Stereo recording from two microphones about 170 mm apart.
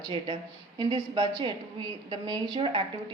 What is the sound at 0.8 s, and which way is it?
A woman's voice, 30° right (ahead or behind).